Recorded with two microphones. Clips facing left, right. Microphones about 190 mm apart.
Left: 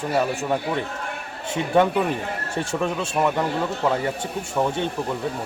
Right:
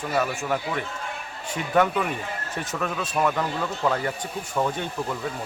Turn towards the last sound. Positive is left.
turn(degrees=25)  # may be behind; listen again after turning